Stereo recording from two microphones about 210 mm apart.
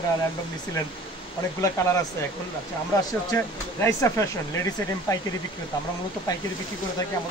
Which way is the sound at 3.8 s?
15° left (ahead or behind).